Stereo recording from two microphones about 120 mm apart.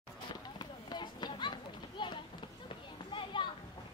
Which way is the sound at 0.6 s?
35° left (ahead or behind).